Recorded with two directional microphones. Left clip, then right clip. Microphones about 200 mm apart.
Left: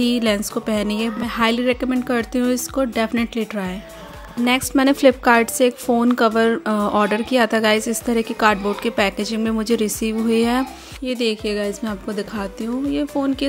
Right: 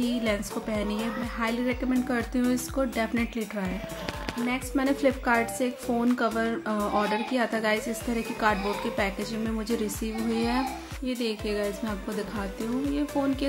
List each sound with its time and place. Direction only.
0.0 s a woman's voice: 45° left (ahead or behind)